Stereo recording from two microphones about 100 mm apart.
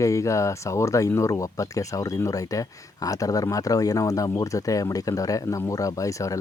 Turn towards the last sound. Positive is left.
turn(degrees=35)  # may be behind; listen again after turning